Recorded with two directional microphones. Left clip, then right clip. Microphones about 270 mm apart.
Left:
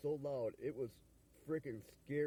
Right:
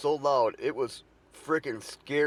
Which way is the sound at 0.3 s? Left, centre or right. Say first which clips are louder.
Right 17 dB; left.